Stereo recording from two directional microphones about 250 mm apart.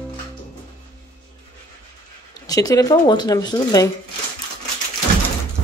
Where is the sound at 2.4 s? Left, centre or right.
Centre.